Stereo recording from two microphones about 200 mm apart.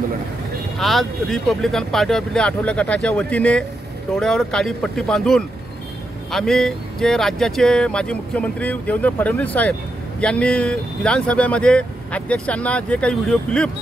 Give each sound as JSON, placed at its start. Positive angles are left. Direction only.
{"t": 0.7, "sound": "speech", "side_deg": 0}